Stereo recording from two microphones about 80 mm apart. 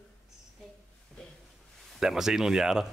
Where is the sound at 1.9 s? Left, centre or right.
Centre.